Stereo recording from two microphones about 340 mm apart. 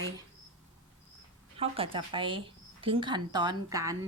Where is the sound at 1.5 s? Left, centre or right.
Centre.